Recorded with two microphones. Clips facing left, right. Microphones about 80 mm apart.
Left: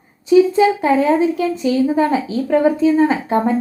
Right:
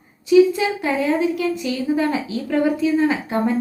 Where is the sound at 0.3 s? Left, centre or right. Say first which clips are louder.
Left 3 dB; left.